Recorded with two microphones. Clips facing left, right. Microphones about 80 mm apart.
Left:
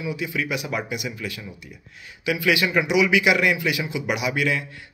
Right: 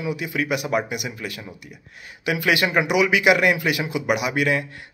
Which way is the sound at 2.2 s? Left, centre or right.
Right.